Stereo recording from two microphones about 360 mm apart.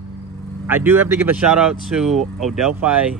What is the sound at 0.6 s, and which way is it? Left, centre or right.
Speech, centre.